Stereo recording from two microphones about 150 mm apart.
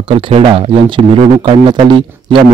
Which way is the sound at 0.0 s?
35° right (ahead or behind).